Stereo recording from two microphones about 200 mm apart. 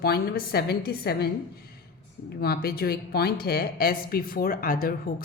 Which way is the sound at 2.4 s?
50° left (ahead or behind).